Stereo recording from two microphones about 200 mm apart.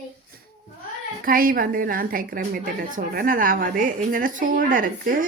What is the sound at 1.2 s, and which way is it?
A woman's voice, 45° right (ahead or behind).